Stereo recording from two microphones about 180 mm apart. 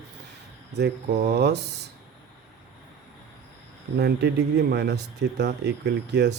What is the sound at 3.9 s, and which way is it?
A man's voice, 65° right (ahead or behind).